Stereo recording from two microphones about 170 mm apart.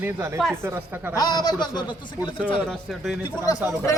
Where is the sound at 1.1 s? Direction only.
25° left (ahead or behind).